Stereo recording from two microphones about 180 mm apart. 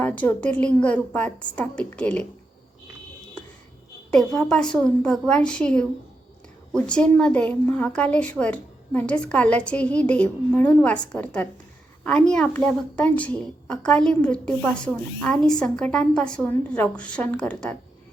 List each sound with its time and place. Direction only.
0.0 s a woman's voice: 10° left (ahead or behind)
4.1 s a woman's voice: 5° left (ahead or behind)